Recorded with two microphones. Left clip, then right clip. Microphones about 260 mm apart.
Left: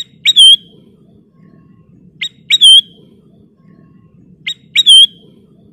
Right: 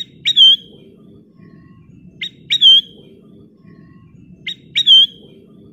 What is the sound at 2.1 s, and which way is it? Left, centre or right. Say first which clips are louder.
Owl: left 6 dB; centre.